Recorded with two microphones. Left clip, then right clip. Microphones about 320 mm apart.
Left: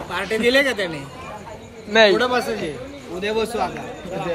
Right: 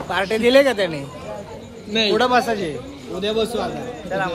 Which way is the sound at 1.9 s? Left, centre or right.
Centre.